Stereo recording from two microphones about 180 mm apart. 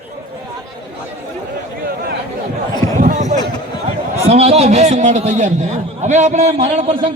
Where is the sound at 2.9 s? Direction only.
45° right (ahead or behind).